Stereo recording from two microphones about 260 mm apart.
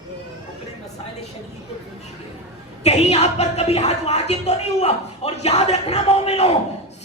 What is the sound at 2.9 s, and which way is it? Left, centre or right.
Speech, left.